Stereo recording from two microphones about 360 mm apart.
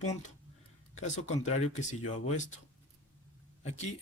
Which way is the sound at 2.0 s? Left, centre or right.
Left.